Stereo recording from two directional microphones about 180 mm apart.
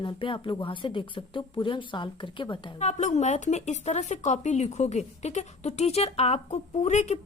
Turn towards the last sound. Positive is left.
turn(degrees=40)  # may be behind; listen again after turning